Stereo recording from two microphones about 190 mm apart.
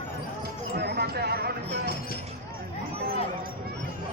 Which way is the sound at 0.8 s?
60° right (ahead or behind).